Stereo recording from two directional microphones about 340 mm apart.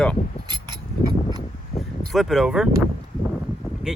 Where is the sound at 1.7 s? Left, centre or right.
Centre.